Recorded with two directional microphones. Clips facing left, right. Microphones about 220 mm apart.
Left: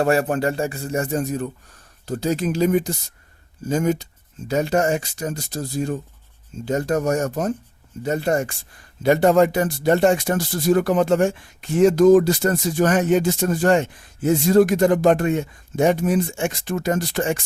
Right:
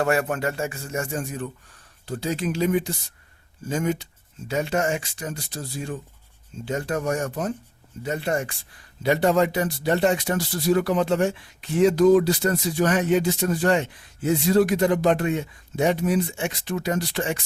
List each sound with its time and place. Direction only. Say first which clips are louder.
0.0 s speech: left 4 dB; 35° left (ahead or behind)